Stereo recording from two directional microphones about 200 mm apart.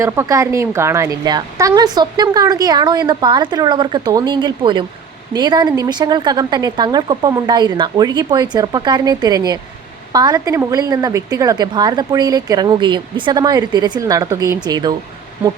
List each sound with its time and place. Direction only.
0.0 s a woman's voice: 15° right (ahead or behind)